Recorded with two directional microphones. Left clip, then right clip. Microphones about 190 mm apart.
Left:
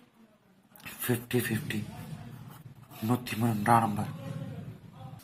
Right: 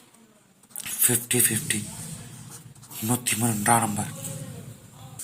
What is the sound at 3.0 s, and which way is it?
A man's voice, 15° right (ahead or behind).